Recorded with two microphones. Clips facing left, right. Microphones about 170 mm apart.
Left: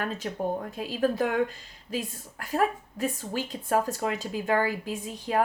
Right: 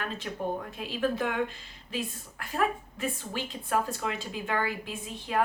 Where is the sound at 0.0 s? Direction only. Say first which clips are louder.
Left 3 dB; 40° left (ahead or behind).